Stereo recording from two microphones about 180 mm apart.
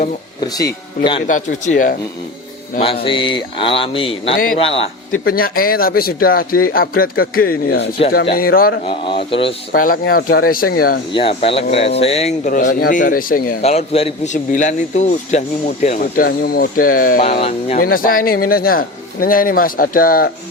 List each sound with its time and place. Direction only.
0.4 s speech: 20° left (ahead or behind)
1.3 s speech: 45° left (ahead or behind)
2.7 s speech: 30° left (ahead or behind)
5.2 s a man's voice: 55° left (ahead or behind)
8.9 s speech: 30° left (ahead or behind)
9.7 s a man's voice: 50° left (ahead or behind)
11.1 s speech: 30° left (ahead or behind)
12.5 s speech: 50° left (ahead or behind)
13.6 s speech: 35° left (ahead or behind); by 20.3 s 55° left (ahead or behind)